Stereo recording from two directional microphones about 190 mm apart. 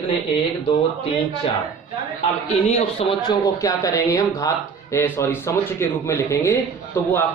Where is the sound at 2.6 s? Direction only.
35° left (ahead or behind).